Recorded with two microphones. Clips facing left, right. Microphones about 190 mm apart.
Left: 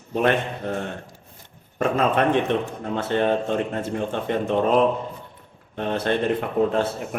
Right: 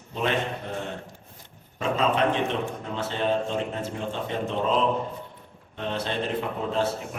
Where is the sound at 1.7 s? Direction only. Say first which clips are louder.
Left 3 dB; 55° left (ahead or behind).